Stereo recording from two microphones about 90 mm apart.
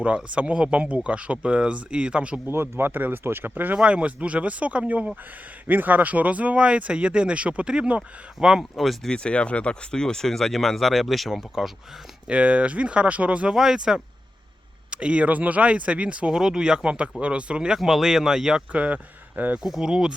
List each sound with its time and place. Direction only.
0.0 s speech: 15° right (ahead or behind)
2.5 s speech: 25° right (ahead or behind); by 9.1 s centre (ahead or behind)
9.1 s speech: 10° left (ahead or behind); by 19.6 s 15° right (ahead or behind)
19.6 s speech: 5° right (ahead or behind)